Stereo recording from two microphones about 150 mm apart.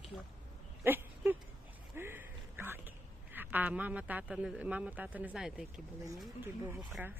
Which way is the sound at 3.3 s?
10° right (ahead or behind).